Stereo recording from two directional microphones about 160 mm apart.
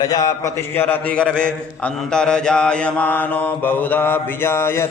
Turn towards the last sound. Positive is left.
turn(degrees=15)  # may be behind; listen again after turning